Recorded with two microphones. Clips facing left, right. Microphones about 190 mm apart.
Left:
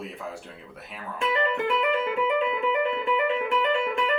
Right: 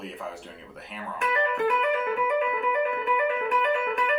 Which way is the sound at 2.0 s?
25° left (ahead or behind).